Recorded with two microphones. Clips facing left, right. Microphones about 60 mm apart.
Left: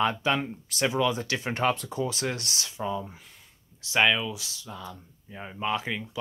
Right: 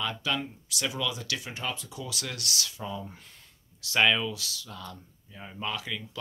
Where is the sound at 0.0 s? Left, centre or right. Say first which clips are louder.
Left 6 dB; left.